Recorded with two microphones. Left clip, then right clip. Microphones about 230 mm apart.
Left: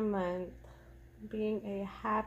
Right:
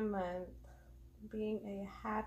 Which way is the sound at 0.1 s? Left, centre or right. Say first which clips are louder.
Left 5 dB; left.